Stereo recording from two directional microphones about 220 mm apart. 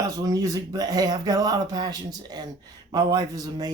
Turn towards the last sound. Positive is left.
turn(degrees=-15)  # may be behind; listen again after turning